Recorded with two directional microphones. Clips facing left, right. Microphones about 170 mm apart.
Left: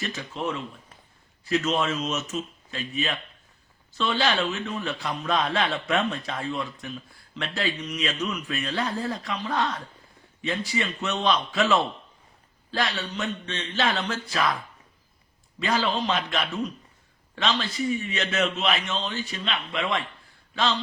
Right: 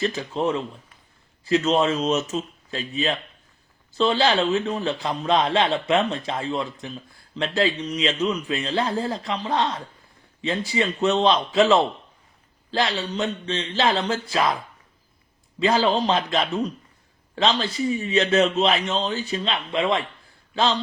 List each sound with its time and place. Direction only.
0.0 s a man's voice: 30° right (ahead or behind)